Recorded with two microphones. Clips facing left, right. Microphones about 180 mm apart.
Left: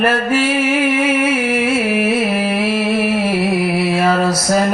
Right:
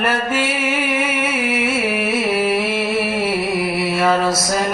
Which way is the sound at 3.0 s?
30° left (ahead or behind).